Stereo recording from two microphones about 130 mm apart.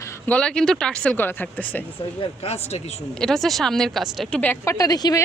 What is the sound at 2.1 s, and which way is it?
Speech, 50° left (ahead or behind).